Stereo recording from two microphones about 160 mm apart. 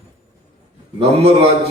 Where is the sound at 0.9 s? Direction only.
40° right (ahead or behind).